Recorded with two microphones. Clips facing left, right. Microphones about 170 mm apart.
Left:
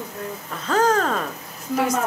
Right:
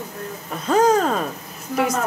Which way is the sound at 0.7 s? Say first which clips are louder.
Right 3 dB; 10° right (ahead or behind).